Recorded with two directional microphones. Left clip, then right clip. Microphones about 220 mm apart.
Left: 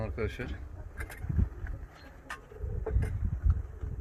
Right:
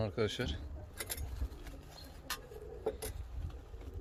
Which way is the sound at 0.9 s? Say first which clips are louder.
Left 1 dB; 55° right (ahead or behind).